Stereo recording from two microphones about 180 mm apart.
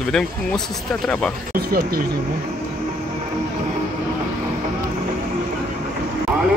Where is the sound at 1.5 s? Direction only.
55° right (ahead or behind).